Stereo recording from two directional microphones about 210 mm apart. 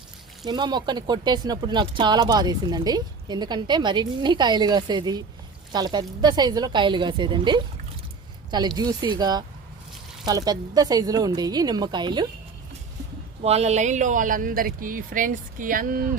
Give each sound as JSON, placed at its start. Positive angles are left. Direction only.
{"t": 0.4, "sound": "speech", "side_deg": -20}
{"t": 13.4, "sound": "speech", "side_deg": -30}